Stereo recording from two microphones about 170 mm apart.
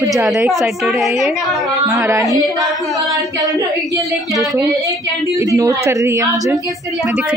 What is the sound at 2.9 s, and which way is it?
A woman's voice, 20° right (ahead or behind).